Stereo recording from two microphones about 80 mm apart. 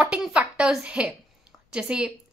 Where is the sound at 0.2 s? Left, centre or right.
Centre.